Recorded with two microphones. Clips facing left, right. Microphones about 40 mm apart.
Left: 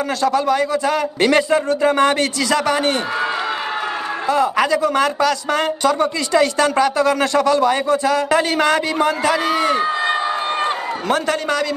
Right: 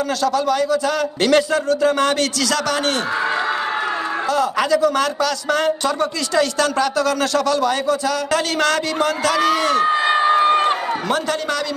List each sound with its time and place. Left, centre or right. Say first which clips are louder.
0.2 s speech: left 3 dB; left
4.3 s speech: left 2 dB; left
9.8 s a sound: right 3 dB; right